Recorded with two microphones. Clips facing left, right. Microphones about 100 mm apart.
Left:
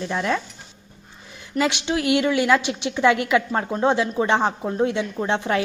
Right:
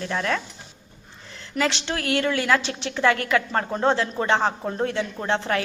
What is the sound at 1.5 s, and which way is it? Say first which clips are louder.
A woman's voice: left 3 dB; 15° left (ahead or behind).